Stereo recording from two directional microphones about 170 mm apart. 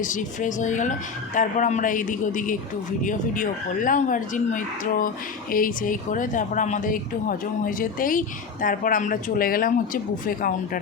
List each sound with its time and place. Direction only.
0.0 s speech: 50° left (ahead or behind)